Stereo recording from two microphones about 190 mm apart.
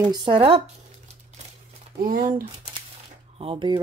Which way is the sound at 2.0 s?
45° right (ahead or behind).